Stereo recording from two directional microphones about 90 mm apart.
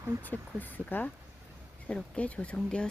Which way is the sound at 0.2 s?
20° left (ahead or behind).